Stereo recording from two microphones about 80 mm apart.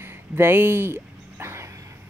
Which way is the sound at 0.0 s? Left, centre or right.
Right.